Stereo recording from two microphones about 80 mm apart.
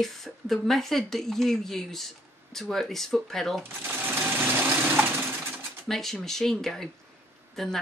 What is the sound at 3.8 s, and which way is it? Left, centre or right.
Sewing machine, right.